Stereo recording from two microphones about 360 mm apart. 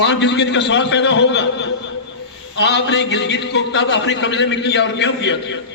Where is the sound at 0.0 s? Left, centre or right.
Left.